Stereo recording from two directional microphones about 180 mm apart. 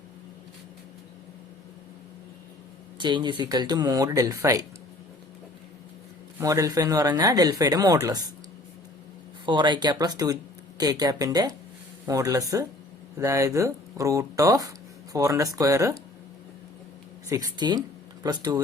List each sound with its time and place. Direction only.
3.0 s speech: 25° right (ahead or behind)
6.4 s speech: 20° right (ahead or behind)
9.5 s speech: 25° right (ahead or behind)
17.2 s speech: 20° right (ahead or behind)